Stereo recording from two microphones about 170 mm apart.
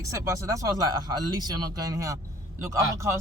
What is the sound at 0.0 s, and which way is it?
Speech, 15° right (ahead or behind).